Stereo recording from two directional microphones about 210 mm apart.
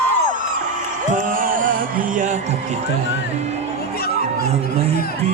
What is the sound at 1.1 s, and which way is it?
Music, 40° right (ahead or behind).